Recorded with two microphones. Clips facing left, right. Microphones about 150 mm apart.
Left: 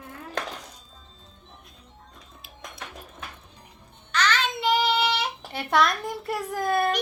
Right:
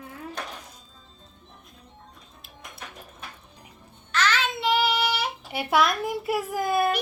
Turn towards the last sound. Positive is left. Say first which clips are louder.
# even
turn(degrees=-5)  # may be behind; listen again after turning